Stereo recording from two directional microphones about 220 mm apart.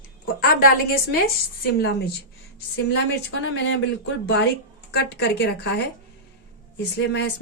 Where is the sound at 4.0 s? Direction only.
55° left (ahead or behind).